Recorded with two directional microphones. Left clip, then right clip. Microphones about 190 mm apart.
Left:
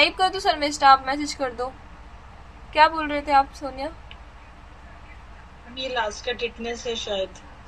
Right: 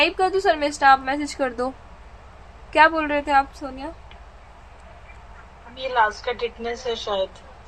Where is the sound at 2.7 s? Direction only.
25° right (ahead or behind).